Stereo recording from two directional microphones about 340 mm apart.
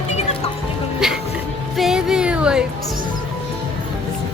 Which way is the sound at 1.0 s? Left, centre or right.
Centre.